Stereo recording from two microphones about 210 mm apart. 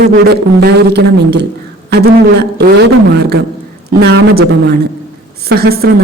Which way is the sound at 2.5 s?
55° right (ahead or behind).